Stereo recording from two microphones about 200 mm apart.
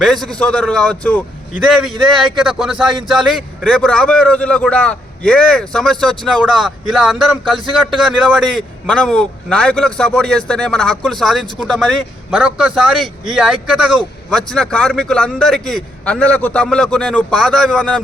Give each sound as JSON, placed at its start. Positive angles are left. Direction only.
{"t": 0.0, "sound": "a man's voice", "side_deg": 0}